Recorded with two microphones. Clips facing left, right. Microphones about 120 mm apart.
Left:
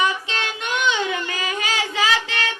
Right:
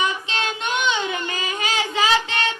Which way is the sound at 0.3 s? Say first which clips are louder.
Right 1 dB; 25° right (ahead or behind).